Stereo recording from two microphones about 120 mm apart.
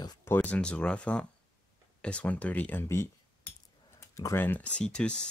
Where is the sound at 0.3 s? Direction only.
15° left (ahead or behind).